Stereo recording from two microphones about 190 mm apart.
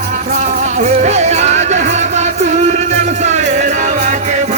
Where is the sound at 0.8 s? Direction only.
40° right (ahead or behind).